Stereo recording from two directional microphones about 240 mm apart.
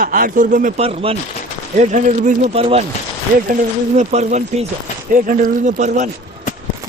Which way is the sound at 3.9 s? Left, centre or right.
Right.